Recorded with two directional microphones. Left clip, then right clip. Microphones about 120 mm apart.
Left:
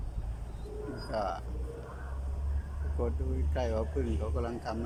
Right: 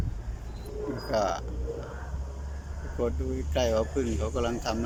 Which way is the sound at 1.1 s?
Centre (ahead or behind).